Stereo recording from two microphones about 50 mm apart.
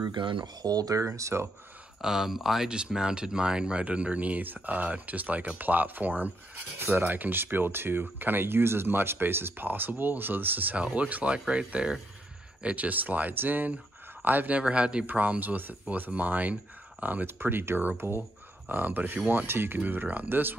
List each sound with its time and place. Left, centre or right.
0.9 s speech: right
2.0 s speech: centre
2.7 s speech: centre; by 14.6 s right
14.6 s speech: right
18.7 s speech: right
19.8 s speech: right